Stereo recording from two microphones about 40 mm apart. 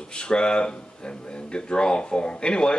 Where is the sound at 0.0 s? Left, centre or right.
Left.